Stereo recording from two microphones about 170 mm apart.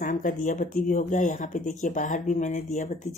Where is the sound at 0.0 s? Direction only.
50° left (ahead or behind).